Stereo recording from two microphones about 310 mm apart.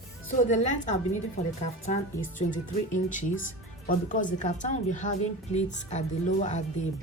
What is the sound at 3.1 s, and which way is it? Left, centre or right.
A woman's voice, left.